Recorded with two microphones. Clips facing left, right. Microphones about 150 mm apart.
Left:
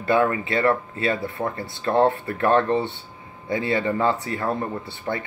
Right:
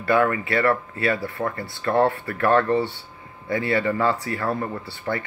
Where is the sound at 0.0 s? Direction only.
20° left (ahead or behind).